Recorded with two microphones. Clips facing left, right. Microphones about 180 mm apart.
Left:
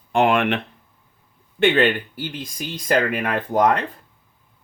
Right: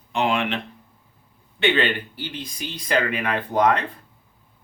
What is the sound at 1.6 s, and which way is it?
Speech, 50° left (ahead or behind).